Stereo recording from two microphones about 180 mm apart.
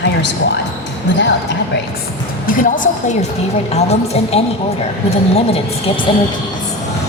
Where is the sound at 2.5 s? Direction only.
50° left (ahead or behind).